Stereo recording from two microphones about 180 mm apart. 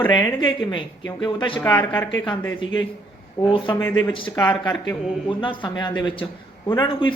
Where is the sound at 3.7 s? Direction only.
10° left (ahead or behind).